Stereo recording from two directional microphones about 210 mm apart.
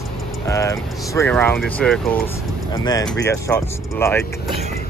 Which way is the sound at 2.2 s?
20° left (ahead or behind).